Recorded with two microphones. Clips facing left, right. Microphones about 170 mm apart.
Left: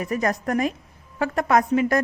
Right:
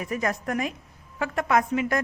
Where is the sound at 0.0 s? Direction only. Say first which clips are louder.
Left 4 dB; 40° left (ahead or behind).